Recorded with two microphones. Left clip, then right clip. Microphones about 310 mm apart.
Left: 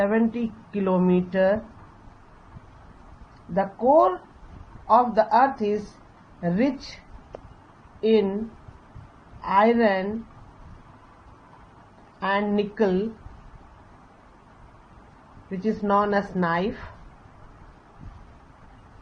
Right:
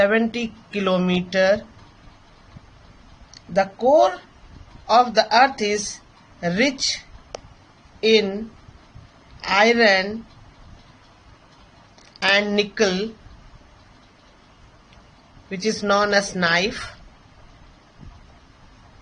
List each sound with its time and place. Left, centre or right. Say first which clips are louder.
0.0 s speech: right 5 dB; right
3.5 s speech: right 3 dB; right
8.0 s speech: right 4 dB; right
9.4 s speech: right 3 dB; right
12.2 s speech: right 6 dB; right
15.4 s speech: right 4 dB; right